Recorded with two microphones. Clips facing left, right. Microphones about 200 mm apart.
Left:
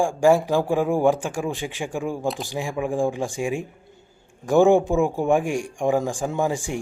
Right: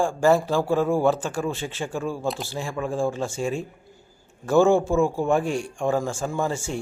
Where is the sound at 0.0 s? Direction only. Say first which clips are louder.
Left 2 dB; 15° left (ahead or behind).